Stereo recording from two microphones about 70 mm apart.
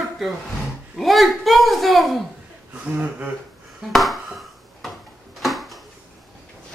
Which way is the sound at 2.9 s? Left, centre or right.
Right.